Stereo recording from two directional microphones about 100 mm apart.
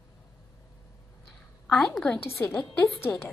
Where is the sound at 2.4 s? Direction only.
25° left (ahead or behind).